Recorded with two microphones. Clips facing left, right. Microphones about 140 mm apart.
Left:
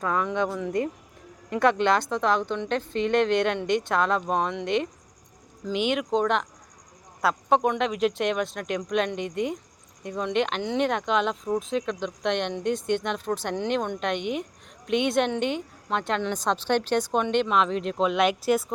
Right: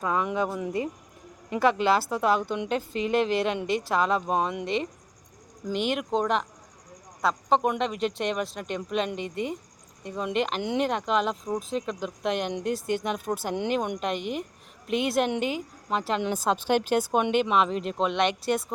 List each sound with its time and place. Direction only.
0.0 s a woman's voice: 10° right (ahead or behind)